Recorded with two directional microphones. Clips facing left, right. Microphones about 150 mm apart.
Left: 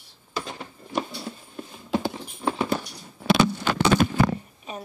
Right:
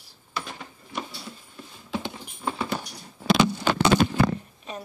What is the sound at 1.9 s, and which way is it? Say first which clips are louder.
Clip-clop: left 6 dB; 40° left (ahead or behind).